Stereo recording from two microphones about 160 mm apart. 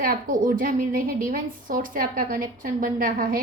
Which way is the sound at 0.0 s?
60° right (ahead or behind).